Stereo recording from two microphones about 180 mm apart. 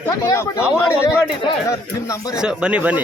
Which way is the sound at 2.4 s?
5° right (ahead or behind).